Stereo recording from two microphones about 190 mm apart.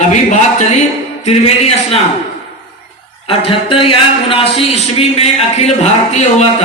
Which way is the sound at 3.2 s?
30° left (ahead or behind).